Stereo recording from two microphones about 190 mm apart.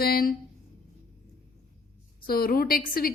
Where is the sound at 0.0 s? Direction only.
50° left (ahead or behind).